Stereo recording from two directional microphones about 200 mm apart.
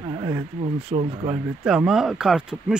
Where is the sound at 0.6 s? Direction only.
30° right (ahead or behind).